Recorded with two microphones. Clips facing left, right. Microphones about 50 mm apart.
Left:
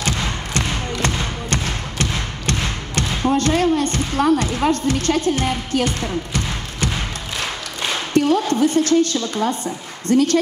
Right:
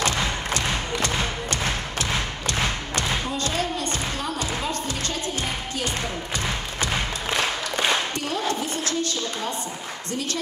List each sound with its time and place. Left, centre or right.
0.6 s music: left
3.0 s a sound: left
8.1 s a woman's voice: left